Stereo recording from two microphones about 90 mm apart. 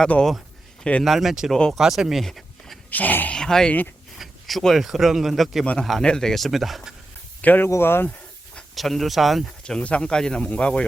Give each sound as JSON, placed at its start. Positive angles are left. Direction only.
{"t": 0.0, "sound": "speech", "side_deg": 10}
{"t": 1.0, "sound": "speech", "side_deg": 0}
{"t": 1.5, "sound": "speech", "side_deg": 10}
{"t": 1.8, "sound": "speech", "side_deg": -5}
{"t": 2.9, "sound": "speech", "side_deg": 20}
{"t": 3.3, "sound": "speech", "side_deg": 10}
{"t": 7.4, "sound": "speech", "side_deg": 20}
{"t": 7.7, "sound": "snake", "side_deg": 25}
{"t": 8.7, "sound": "speech", "side_deg": 0}